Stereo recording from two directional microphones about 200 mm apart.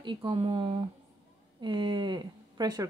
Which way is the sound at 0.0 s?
25° right (ahead or behind).